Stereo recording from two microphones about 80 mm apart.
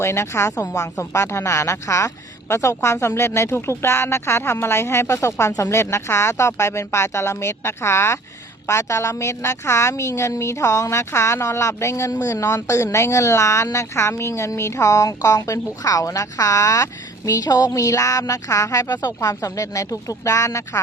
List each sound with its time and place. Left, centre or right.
0.0 s speech: left